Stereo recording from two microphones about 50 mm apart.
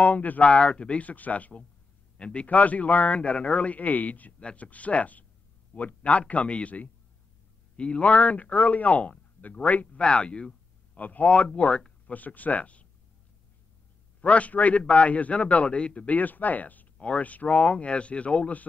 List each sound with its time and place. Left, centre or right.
0.0 s a man's voice: left
2.4 s a man's voice: left
9.9 s a man's voice: left
11.0 s a man's voice: left
14.2 s a man's voice: left